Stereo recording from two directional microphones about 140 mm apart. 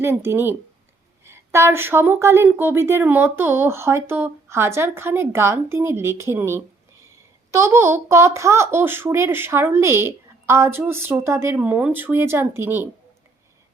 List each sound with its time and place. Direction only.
0.0 s speech: 15° right (ahead or behind)